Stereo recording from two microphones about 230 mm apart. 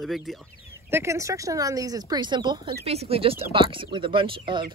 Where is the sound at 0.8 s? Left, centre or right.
Centre.